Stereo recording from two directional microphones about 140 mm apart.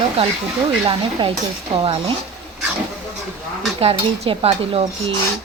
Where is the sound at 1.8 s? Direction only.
40° right (ahead or behind).